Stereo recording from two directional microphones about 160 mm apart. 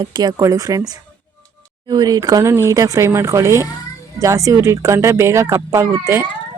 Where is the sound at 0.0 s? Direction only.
25° right (ahead or behind).